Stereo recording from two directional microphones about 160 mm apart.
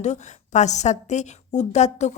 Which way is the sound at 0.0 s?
45° left (ahead or behind).